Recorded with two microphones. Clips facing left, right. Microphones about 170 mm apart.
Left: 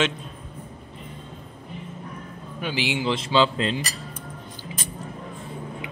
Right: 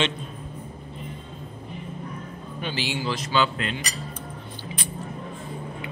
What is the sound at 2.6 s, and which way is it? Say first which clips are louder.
Speech: left 3 dB; 15° left (ahead or behind).